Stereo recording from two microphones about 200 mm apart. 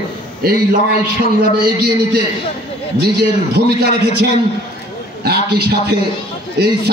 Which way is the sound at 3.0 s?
55° right (ahead or behind).